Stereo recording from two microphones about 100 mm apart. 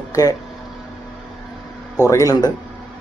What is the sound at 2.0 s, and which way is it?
Speech, 35° left (ahead or behind).